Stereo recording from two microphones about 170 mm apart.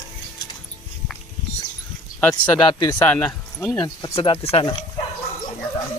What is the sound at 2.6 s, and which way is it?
Speech, 30° left (ahead or behind).